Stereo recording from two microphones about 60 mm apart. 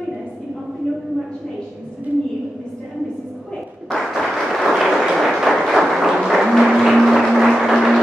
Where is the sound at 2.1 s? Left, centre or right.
Right.